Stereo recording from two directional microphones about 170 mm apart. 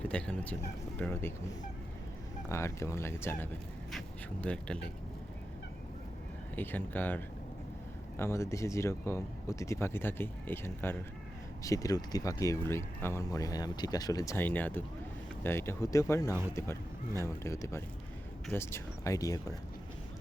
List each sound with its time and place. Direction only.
0.0 s speech: 5° left (ahead or behind)
2.5 s speech: 15° left (ahead or behind)
6.6 s speech: 10° left (ahead or behind)